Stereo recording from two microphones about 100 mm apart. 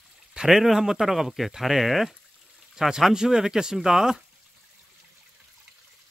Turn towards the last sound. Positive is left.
turn(degrees=-5)  # may be behind; listen again after turning